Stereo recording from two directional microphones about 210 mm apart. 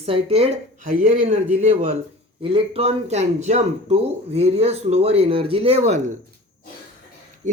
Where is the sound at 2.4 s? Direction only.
25° right (ahead or behind).